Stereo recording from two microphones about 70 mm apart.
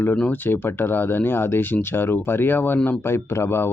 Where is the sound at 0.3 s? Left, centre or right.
Left.